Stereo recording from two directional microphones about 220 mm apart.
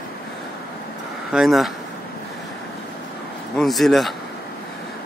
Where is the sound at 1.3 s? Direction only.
Centre (ahead or behind).